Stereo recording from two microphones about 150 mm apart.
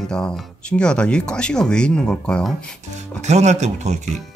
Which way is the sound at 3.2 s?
50° right (ahead or behind).